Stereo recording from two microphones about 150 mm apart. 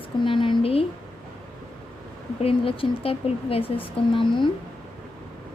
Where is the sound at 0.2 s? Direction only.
35° left (ahead or behind).